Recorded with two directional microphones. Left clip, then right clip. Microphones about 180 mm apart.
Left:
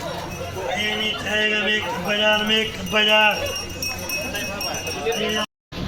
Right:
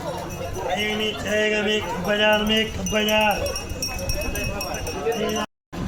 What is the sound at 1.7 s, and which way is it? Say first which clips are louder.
Speech: left 1 dB; 90° right.